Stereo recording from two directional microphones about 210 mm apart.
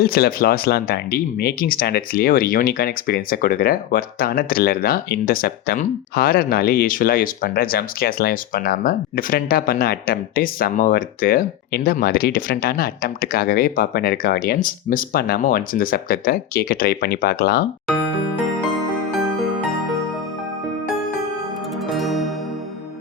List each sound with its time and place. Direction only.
0.0 s speech: 45° left (ahead or behind)
21.8 s music: centre (ahead or behind)